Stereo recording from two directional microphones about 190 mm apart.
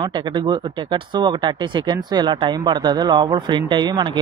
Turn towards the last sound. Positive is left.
turn(degrees=-25)  # may be behind; listen again after turning